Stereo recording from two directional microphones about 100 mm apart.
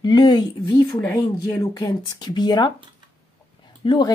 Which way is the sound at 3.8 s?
50° left (ahead or behind).